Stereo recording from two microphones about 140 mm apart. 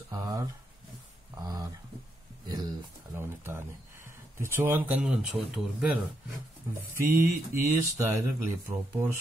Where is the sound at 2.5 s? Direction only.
25° right (ahead or behind).